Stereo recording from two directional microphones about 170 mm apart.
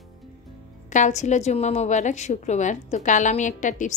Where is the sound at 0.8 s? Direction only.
45° left (ahead or behind).